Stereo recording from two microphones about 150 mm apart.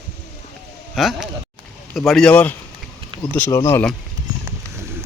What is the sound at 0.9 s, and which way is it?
A man's voice, centre (ahead or behind).